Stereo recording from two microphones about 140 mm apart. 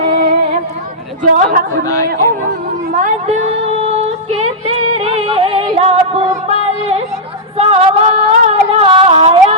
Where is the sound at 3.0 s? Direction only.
50° right (ahead or behind).